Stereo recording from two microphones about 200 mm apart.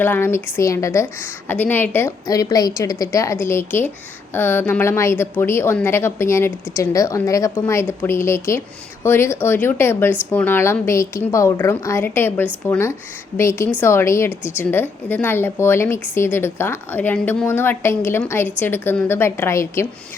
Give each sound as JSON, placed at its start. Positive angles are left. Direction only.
{"t": 0.0, "sound": "a woman's voice", "side_deg": 10}